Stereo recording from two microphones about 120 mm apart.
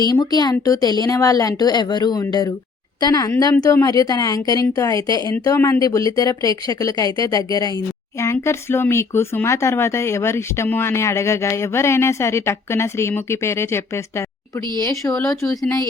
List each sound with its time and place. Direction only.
0.1 s speech: 35° left (ahead or behind)
5.3 s speech: 20° left (ahead or behind)